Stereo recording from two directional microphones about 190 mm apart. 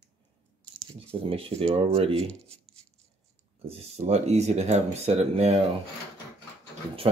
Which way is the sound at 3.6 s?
30° right (ahead or behind).